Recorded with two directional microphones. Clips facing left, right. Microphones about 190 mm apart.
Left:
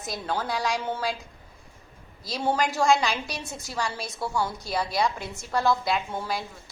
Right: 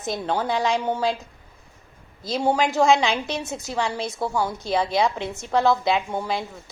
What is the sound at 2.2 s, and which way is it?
A woman's voice, 20° right (ahead or behind).